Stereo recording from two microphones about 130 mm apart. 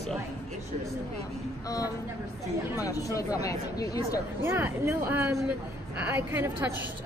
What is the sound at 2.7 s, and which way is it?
Speech, 25° left (ahead or behind).